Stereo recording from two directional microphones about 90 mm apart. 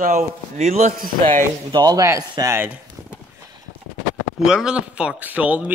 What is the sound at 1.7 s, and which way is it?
Speech, 50° right (ahead or behind).